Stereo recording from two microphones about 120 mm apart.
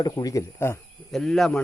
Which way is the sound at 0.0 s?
30° left (ahead or behind).